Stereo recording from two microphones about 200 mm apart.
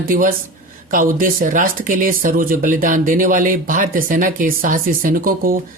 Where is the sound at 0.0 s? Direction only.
45° right (ahead or behind).